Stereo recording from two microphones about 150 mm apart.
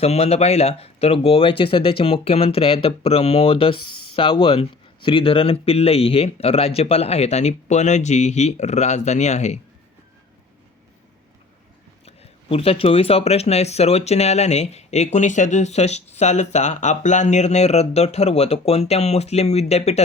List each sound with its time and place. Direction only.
0.0 s speech: 45° left (ahead or behind)
12.0 s speech: 40° left (ahead or behind)